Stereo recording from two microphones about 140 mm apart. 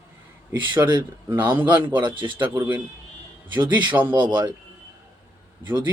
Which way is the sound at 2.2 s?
35° right (ahead or behind).